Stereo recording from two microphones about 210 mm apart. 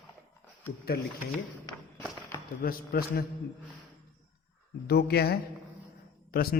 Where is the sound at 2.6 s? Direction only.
45° left (ahead or behind).